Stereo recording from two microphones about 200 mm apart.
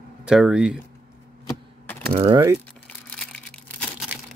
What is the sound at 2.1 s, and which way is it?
Speech, 30° right (ahead or behind).